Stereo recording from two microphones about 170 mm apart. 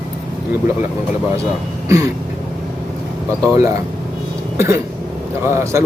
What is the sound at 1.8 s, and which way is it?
Throat clearing, 20° right (ahead or behind).